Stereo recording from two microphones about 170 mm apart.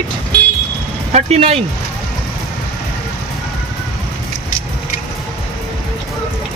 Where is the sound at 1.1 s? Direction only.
40° right (ahead or behind).